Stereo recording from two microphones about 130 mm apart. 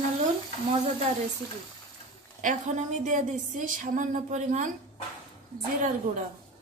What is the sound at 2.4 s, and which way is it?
A woman's voice, 75° right (ahead or behind).